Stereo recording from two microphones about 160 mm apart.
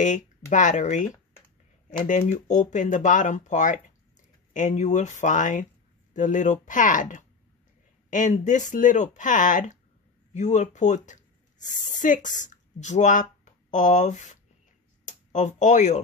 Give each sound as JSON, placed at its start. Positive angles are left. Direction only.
{"t": 0.5, "sound": "speech", "side_deg": 50}